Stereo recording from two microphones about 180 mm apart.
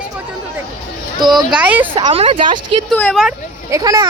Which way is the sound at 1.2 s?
25° right (ahead or behind).